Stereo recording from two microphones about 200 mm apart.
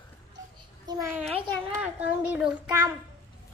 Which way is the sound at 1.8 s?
5° right (ahead or behind).